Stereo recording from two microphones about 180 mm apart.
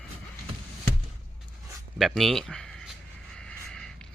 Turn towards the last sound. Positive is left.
turn(degrees=5)  # may be behind; listen again after turning